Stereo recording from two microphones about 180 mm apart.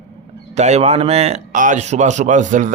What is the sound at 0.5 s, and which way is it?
Speech, 40° right (ahead or behind).